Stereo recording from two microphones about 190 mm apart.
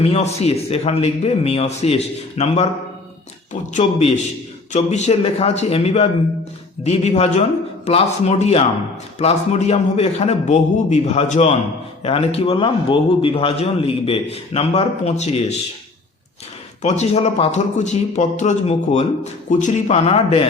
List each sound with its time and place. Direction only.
0.0 s speech: 35° left (ahead or behind)
16.8 s speech: 35° left (ahead or behind)